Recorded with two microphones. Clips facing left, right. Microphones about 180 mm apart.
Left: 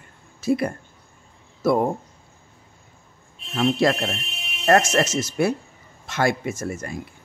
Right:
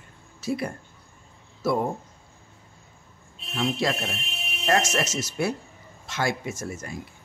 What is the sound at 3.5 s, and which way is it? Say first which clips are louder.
Speech: left 6 dB; 55° left (ahead or behind).